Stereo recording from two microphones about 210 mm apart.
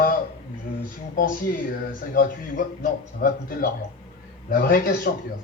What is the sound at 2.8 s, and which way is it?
Speech, 45° left (ahead or behind).